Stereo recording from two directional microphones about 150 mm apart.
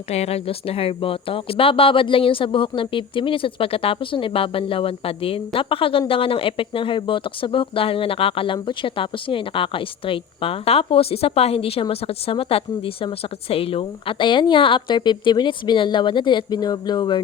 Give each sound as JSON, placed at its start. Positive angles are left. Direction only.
{"t": 0.1, "sound": "speech", "side_deg": 45}